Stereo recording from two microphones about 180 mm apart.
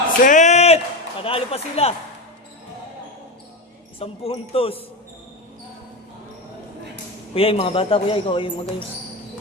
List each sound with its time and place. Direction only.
0.3 s a sound: 40° left (ahead or behind)
1.2 s a man's voice: 30° left (ahead or behind)
4.0 s a man's voice: 30° left (ahead or behind)
7.3 s a man's voice: 30° left (ahead or behind)